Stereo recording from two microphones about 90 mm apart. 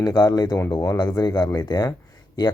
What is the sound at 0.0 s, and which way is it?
Speech, 45° left (ahead or behind).